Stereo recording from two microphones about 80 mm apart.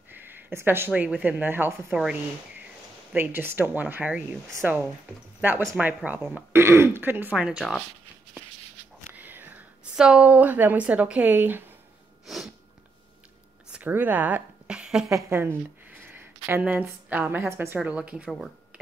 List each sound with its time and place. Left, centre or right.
0.1 s a sound: right
1.0 s speech: centre
1.4 s speech: right
3.2 s speech: right
7.3 s speech: centre
9.1 s a sound: right
9.9 s speech: centre
13.7 s a sound: centre
14.8 s a woman's voice: centre
15.2 s a sound: right
17.1 s speech: right
17.7 s speech: centre